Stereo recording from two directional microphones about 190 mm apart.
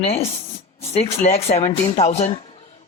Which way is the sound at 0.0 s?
30° left (ahead or behind).